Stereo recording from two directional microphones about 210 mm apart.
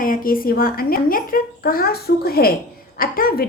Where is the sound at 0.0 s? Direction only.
40° left (ahead or behind).